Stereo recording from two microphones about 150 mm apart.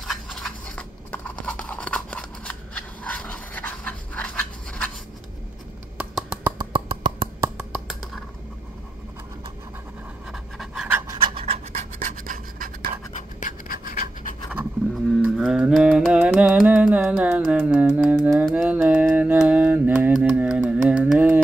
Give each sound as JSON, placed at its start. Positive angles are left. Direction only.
{"t": 0.0, "sound": "a sound", "side_deg": 0}
{"t": 5.9, "sound": "a sound", "side_deg": -10}
{"t": 6.6, "sound": "plop", "side_deg": -35}
{"t": 7.5, "sound": "a sound", "side_deg": -5}
{"t": 10.3, "sound": "scratch", "side_deg": -5}
{"t": 11.2, "sound": "scratch", "side_deg": -40}
{"t": 11.7, "sound": "scratch", "side_deg": -65}
{"t": 13.4, "sound": "scratch", "side_deg": 70}
{"t": 15.0, "sound": "music", "side_deg": -5}
{"t": 18.3, "sound": "mantra", "side_deg": 0}